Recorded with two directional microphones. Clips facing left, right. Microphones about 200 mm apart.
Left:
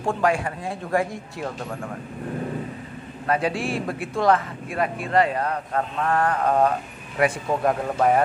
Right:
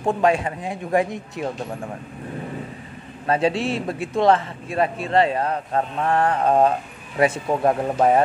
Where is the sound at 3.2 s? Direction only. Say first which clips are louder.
Right 3 dB; 25° right (ahead or behind).